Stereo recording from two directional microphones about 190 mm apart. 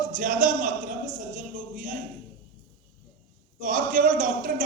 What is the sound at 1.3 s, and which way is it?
Music, 45° right (ahead or behind).